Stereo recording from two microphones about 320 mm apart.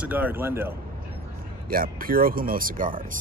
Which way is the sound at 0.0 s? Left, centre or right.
Centre.